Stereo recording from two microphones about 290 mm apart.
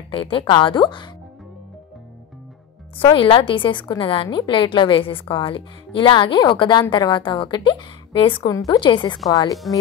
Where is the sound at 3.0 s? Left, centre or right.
Centre.